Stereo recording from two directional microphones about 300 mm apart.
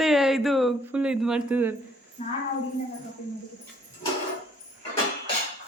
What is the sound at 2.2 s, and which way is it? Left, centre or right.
Speech, left.